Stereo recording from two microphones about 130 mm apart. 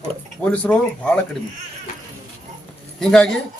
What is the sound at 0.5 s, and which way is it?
Speech, 10° left (ahead or behind).